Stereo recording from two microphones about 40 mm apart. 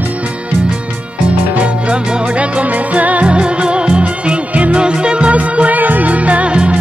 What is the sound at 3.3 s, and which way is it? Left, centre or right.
Music, right.